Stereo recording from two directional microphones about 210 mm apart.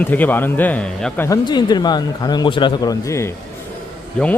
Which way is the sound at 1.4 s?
20° left (ahead or behind).